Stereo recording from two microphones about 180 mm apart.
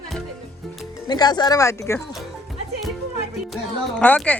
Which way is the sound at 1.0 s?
20° left (ahead or behind).